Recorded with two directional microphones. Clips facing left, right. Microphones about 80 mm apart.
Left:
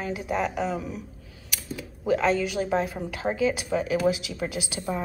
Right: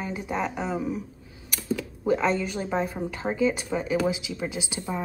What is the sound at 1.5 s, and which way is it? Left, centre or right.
Arrow, right.